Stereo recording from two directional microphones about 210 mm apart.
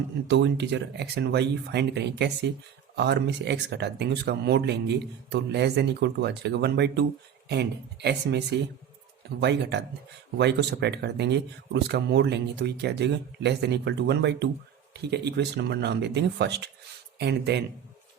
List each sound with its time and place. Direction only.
0.3 s speech: 55° right (ahead or behind)